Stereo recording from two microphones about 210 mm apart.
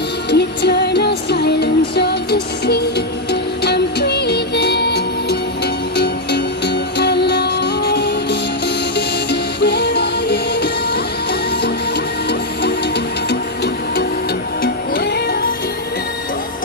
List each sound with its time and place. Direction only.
0.3 s music: 50° left (ahead or behind)
3.3 s music: 50° left (ahead or behind)
12.3 s music: 50° left (ahead or behind)
14.6 s music: 50° left (ahead or behind)